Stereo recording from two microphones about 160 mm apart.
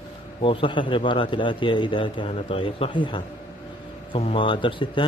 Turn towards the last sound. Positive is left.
turn(degrees=30)  # may be behind; listen again after turning